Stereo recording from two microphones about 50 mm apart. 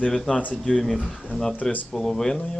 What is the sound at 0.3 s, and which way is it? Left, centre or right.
Speech, left.